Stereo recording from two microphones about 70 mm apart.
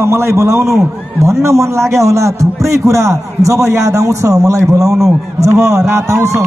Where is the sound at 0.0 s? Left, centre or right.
Right.